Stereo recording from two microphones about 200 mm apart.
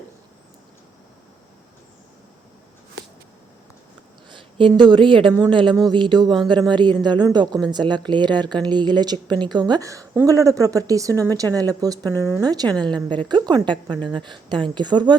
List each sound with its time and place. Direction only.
4.3 s a woman's voice: 25° right (ahead or behind)